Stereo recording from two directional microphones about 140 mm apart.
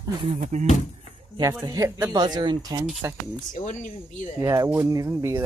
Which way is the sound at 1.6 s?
25° right (ahead or behind).